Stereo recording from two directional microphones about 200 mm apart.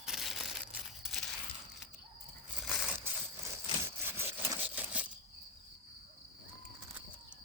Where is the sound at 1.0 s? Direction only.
Centre (ahead or behind).